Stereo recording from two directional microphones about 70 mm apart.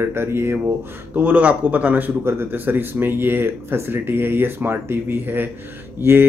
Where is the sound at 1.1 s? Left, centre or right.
Right.